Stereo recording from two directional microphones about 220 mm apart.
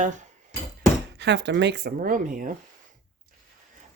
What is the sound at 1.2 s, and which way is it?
Speech, 50° right (ahead or behind).